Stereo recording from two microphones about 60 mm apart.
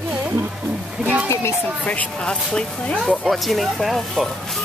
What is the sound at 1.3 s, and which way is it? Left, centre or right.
Speech, left.